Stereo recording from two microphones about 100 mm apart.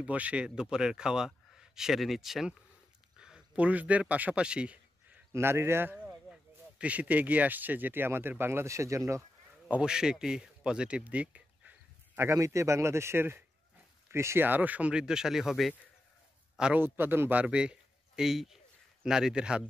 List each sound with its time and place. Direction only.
0.0 s a man's voice: 15° right (ahead or behind)
3.2 s a sound: 10° right (ahead or behind)
5.3 s speech: 25° right (ahead or behind)
9.7 s a man's voice: 10° right (ahead or behind)
12.2 s a man's voice: 30° right (ahead or behind); by 16.8 s 10° right (ahead or behind)
16.8 s a man's voice: 20° right (ahead or behind)